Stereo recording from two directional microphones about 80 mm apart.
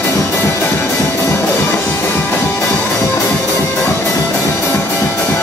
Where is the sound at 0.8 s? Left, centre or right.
Left.